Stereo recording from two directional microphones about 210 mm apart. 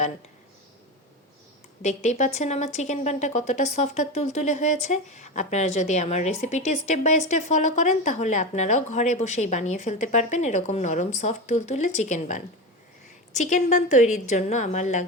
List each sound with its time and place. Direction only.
1.8 s a woman's voice: 35° left (ahead or behind)